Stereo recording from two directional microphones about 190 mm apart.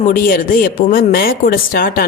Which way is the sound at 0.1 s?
50° left (ahead or behind).